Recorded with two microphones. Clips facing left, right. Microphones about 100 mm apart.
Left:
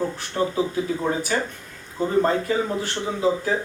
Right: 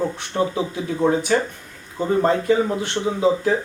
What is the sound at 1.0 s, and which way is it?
Speech, 25° right (ahead or behind).